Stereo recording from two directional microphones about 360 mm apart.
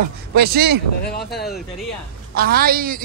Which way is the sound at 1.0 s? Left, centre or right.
Left.